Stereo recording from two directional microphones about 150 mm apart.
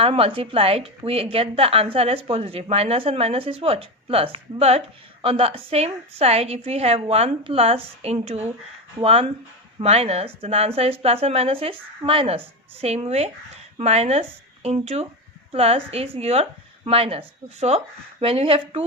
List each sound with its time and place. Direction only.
0.0 s a woman's voice: 40° right (ahead or behind)